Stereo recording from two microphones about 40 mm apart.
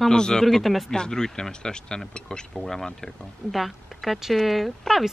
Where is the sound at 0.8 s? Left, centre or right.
Centre.